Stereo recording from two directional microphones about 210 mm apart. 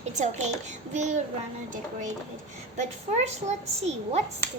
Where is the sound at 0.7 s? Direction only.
35° right (ahead or behind).